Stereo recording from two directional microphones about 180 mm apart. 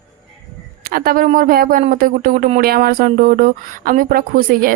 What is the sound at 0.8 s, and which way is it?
Speech, 55° right (ahead or behind).